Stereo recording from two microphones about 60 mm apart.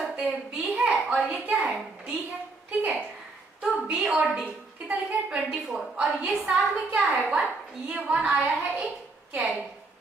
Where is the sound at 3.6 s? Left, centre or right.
Centre.